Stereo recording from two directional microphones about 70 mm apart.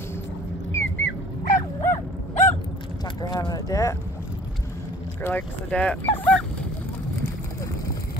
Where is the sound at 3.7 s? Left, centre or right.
Left.